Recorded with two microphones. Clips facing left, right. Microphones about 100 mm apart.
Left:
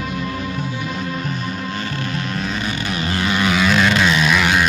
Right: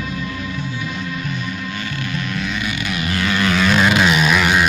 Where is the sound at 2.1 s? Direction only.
35° left (ahead or behind).